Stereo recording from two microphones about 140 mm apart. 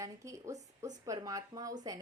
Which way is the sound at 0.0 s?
20° right (ahead or behind).